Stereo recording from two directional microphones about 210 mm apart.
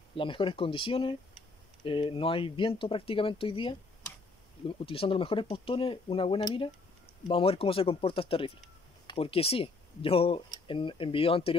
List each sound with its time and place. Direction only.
0.1 s speech: 25° left (ahead or behind)